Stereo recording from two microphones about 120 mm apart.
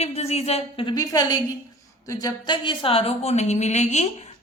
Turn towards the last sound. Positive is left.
turn(degrees=70)  # may be behind; listen again after turning